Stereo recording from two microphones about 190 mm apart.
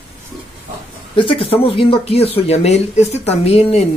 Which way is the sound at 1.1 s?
30° left (ahead or behind).